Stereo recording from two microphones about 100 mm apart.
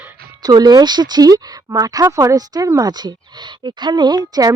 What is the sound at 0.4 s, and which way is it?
Speech, 40° right (ahead or behind).